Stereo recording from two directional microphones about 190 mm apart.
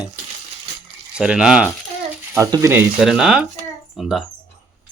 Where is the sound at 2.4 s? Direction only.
20° right (ahead or behind).